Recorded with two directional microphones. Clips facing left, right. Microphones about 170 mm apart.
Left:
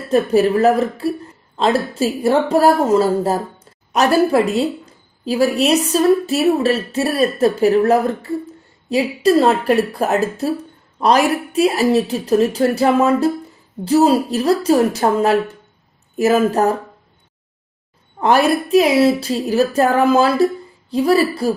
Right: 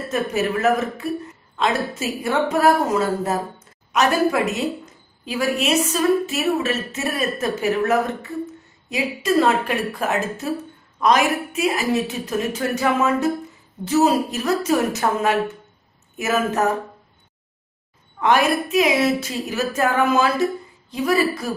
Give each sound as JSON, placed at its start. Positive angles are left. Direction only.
{"t": 0.1, "sound": "a woman's voice", "side_deg": 35}
{"t": 18.2, "sound": "a woman's voice", "side_deg": 35}